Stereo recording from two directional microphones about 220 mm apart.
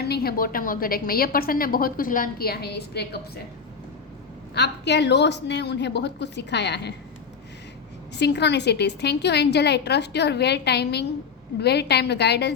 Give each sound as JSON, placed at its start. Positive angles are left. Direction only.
{"t": 0.0, "sound": "a woman's voice", "side_deg": 45}
{"t": 4.5, "sound": "a woman's voice", "side_deg": 50}
{"t": 8.1, "sound": "a woman's voice", "side_deg": 50}